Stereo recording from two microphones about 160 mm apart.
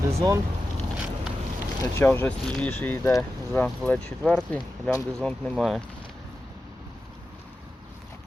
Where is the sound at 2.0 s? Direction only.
10° left (ahead or behind).